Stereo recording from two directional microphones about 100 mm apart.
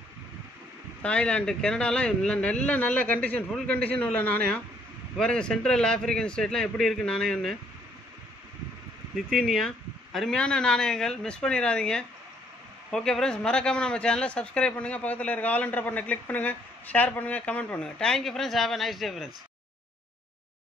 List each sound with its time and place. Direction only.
1.0 s speech: 10° left (ahead or behind)
9.1 s speech: centre (ahead or behind)